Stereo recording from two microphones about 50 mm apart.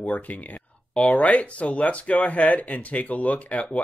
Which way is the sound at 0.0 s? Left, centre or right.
Left.